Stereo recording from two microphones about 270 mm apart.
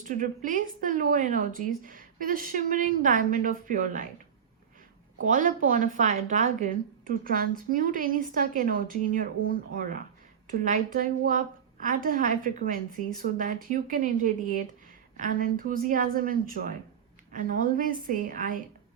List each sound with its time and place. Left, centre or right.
0.1 s a woman's voice: right
5.2 s a woman's voice: right
15.2 s a woman's voice: right